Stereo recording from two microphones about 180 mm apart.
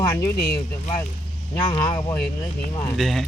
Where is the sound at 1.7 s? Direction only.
25° left (ahead or behind).